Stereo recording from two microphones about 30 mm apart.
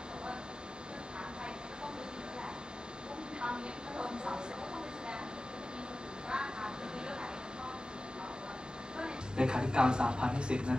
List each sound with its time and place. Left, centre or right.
3.3 s train: right
6.2 s vehicle: right
8.9 s a woman's voice: right